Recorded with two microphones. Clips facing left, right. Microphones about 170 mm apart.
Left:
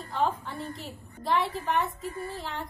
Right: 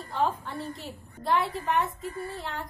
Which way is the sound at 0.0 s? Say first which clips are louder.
Even; centre (ahead or behind).